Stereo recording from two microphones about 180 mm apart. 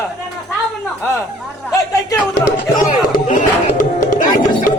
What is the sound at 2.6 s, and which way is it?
Music, 50° left (ahead or behind).